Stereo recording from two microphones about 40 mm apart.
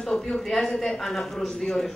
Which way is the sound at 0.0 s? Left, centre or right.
Centre.